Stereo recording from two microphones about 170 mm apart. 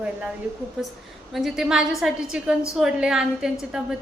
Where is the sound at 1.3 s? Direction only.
Centre (ahead or behind).